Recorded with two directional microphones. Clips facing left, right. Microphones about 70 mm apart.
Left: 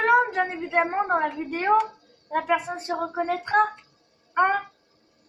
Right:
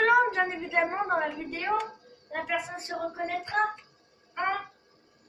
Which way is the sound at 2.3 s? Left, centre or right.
Left.